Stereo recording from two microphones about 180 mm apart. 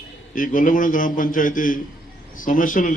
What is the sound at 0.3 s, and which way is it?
A man's voice, 50° left (ahead or behind).